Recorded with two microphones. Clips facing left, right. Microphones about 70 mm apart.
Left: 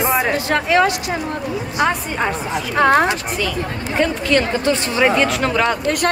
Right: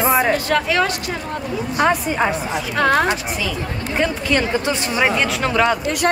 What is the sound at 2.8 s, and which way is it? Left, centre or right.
Speech, left.